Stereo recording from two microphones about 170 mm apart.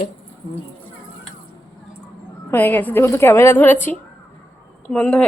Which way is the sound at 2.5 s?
10° left (ahead or behind).